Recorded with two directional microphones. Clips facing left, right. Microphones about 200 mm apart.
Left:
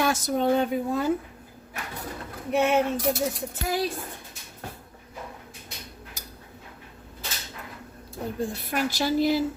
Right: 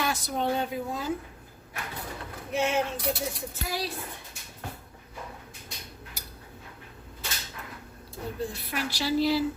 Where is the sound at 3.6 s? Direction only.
50° left (ahead or behind).